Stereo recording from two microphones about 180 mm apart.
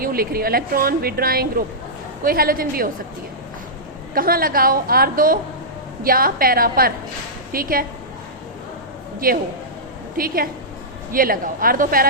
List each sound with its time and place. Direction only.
0.0 s a woman's voice: 55° right (ahead or behind)
4.1 s a woman's voice: 55° right (ahead or behind)
9.2 s a woman's voice: 55° right (ahead or behind)